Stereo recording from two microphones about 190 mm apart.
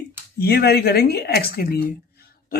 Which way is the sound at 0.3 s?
55° left (ahead or behind).